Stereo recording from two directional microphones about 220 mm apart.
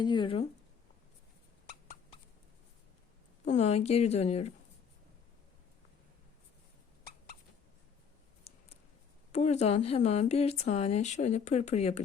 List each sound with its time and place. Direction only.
0.0 s speech: 20° left (ahead or behind)
3.4 s speech: 30° left (ahead or behind)
8.5 s scissors: 30° left (ahead or behind)
9.3 s speech: 30° left (ahead or behind)